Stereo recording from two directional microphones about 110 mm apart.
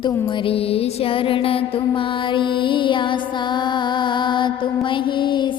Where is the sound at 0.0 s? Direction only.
50° left (ahead or behind).